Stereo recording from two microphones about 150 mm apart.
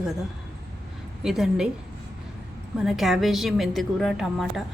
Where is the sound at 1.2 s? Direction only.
Centre (ahead or behind).